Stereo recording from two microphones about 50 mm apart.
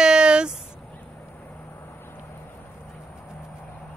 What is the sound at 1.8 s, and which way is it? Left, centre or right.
Vehicle, left.